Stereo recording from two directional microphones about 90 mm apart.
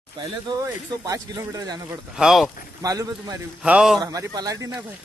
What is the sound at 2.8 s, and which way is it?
Speech, 45° right (ahead or behind).